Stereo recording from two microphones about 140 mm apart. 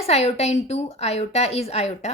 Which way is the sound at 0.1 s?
50° left (ahead or behind).